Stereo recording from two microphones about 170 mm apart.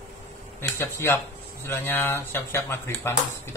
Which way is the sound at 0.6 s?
15° left (ahead or behind).